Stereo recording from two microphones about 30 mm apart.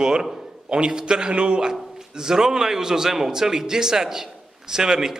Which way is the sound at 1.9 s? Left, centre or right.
Centre.